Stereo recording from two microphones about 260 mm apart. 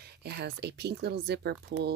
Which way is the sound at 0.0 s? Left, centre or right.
Right.